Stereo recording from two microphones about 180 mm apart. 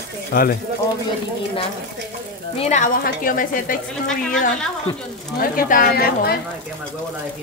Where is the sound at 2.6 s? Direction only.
40° left (ahead or behind).